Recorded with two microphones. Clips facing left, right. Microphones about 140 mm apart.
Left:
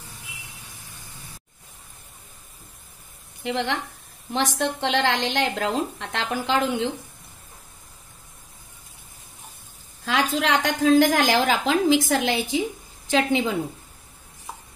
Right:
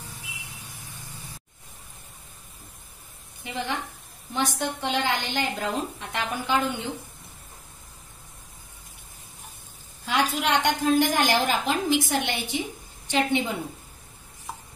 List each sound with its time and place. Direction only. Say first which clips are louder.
3.4 s a woman's voice: left 5 dB; 90° left
10.0 s a woman's voice: left 2 dB; 90° left